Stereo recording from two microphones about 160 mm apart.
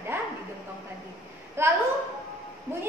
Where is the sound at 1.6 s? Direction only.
15° right (ahead or behind).